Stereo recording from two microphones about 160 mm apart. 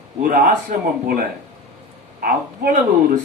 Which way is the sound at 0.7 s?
65° right (ahead or behind).